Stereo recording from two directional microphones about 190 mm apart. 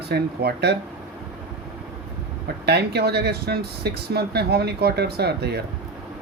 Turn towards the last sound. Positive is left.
turn(degrees=-60)  # may be behind; listen again after turning